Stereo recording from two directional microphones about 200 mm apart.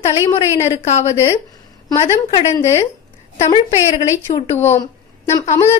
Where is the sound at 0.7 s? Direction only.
30° left (ahead or behind).